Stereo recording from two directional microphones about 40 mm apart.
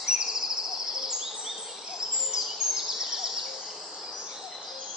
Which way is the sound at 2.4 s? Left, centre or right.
Centre.